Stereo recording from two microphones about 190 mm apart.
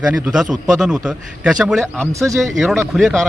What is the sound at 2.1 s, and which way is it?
Speech, 15° right (ahead or behind).